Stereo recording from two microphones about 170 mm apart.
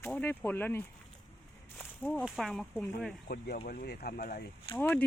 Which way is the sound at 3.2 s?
65° left (ahead or behind).